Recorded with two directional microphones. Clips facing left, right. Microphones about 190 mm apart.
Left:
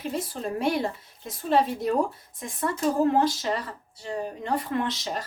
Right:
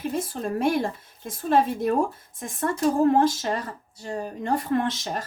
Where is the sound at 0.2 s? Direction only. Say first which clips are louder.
Right 3 dB; 50° right (ahead or behind).